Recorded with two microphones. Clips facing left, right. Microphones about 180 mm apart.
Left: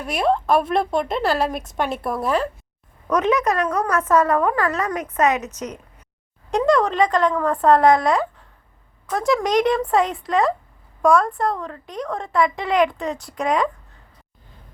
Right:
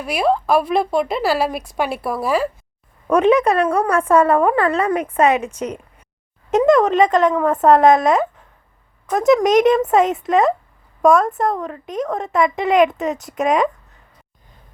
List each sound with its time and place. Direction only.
0.0 s speech: 5° right (ahead or behind)
3.1 s a woman's voice: 30° right (ahead or behind)
6.5 s a woman's voice: 20° right (ahead or behind)